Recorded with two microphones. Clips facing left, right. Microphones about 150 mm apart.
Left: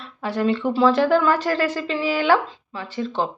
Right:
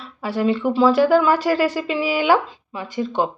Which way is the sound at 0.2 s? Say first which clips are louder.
Right 1 dB; 5° right (ahead or behind).